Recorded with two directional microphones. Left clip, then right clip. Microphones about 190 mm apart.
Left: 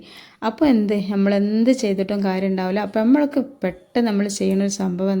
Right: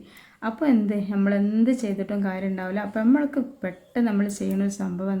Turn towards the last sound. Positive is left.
turn(degrees=30)  # may be behind; listen again after turning